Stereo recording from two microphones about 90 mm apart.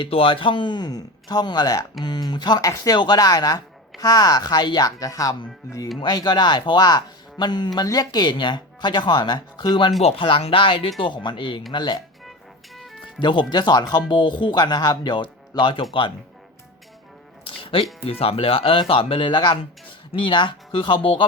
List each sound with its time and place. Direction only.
0.0 s speech: 80° left; by 2.6 s 55° left (ahead or behind)
2.6 s speech: 40° left (ahead or behind)
6.0 s speech: 55° left (ahead or behind)
10.0 s speech: 80° left
11.0 s speech: 60° left (ahead or behind)
11.7 s speech: 55° left (ahead or behind)
12.7 s music: centre (ahead or behind)
13.1 s speech: 60° left (ahead or behind)
14.1 s speech: 60° left (ahead or behind)
17.6 s speech: 80° left
18.0 s speech: 90° left; by 21.2 s 75° left (ahead or behind)